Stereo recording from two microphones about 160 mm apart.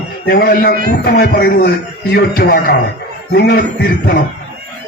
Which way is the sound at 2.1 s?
80° left.